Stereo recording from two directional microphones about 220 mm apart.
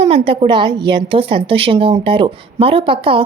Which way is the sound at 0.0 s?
25° right (ahead or behind).